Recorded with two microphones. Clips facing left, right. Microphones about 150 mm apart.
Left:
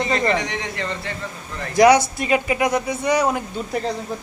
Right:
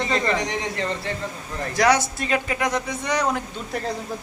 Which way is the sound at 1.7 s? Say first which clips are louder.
Left 6 dB; 15° left (ahead or behind).